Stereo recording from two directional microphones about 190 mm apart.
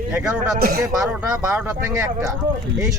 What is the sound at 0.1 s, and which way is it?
Speech, 5° right (ahead or behind).